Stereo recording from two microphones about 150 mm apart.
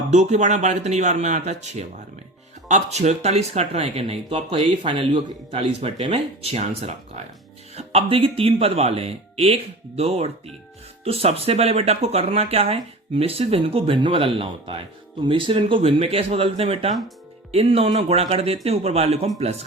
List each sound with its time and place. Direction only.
0.1 s speech: 50° right (ahead or behind)